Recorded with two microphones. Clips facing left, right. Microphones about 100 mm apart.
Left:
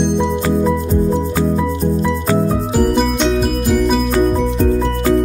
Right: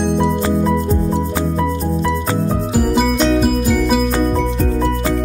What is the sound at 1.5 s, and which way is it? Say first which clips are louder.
Music: left 2 dB; 5° left (ahead or behind).